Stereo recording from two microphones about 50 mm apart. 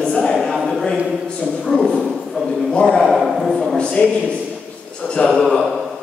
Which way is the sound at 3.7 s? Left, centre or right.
Left.